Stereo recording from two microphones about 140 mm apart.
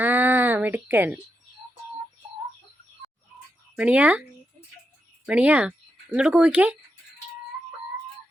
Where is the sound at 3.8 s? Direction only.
10° right (ahead or behind).